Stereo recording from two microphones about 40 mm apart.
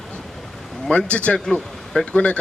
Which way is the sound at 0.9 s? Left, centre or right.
Left.